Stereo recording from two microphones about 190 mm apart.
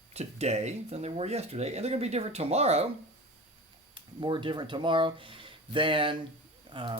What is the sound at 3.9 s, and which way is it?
Speech, 25° right (ahead or behind).